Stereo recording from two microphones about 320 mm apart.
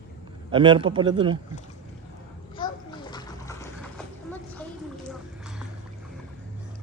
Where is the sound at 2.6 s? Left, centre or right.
Centre.